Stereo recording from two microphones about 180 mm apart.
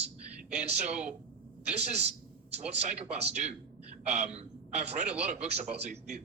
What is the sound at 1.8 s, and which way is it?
A man's voice, 35° right (ahead or behind).